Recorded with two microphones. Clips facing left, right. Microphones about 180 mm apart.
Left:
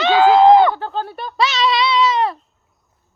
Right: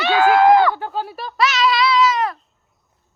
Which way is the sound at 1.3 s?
25° left (ahead or behind).